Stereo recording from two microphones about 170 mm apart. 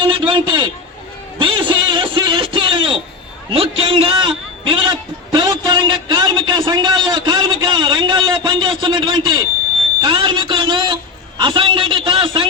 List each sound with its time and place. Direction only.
0.0 s a man's voice: 30° right (ahead or behind)
1.4 s a sound: 30° right (ahead or behind)
3.5 s a man's voice: 35° right (ahead or behind)